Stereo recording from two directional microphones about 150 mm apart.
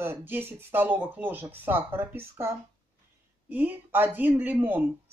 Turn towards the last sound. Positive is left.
turn(degrees=-10)  # may be behind; listen again after turning